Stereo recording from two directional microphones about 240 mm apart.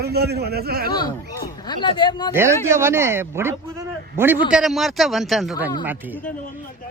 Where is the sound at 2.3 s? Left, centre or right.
Centre.